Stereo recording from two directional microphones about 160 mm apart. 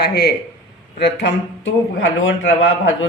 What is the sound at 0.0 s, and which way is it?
Speech, 90° left.